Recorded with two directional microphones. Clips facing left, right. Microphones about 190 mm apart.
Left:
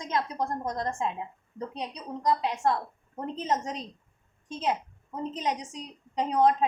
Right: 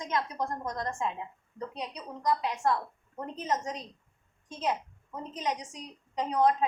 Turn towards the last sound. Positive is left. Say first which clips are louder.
# left 2 dB
turn(degrees=25)  # may be behind; listen again after turning